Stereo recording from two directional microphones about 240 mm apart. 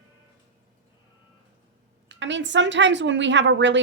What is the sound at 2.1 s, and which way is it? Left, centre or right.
A woman's voice, right.